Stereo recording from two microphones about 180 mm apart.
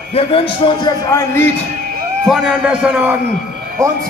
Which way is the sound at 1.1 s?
15° left (ahead or behind).